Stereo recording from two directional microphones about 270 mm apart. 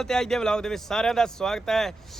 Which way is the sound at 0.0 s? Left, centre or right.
Centre.